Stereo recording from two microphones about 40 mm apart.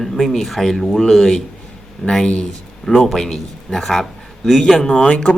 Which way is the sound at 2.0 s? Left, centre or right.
Left.